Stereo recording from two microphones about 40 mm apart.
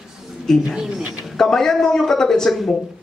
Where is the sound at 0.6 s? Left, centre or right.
Centre.